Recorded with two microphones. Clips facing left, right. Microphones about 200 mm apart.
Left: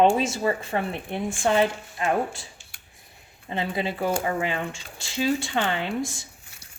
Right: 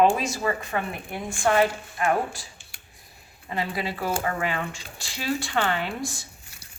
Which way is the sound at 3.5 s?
25° left (ahead or behind).